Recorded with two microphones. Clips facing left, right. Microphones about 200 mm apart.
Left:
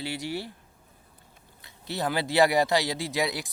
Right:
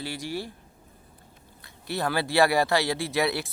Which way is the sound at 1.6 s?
20° left (ahead or behind).